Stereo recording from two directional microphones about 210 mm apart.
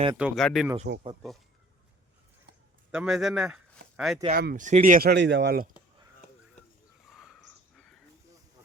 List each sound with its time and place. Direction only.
0.2 s speech: centre (ahead or behind)
2.9 s speech: 5° right (ahead or behind)
4.4 s speech: 45° right (ahead or behind)
7.1 s a sound: centre (ahead or behind)